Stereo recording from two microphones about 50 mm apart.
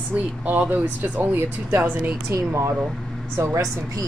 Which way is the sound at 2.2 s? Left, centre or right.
Right.